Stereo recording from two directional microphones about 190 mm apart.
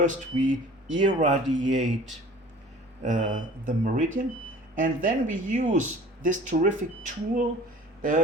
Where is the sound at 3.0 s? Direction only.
40° right (ahead or behind).